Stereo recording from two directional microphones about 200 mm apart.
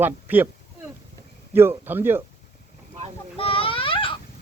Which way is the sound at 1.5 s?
10° right (ahead or behind).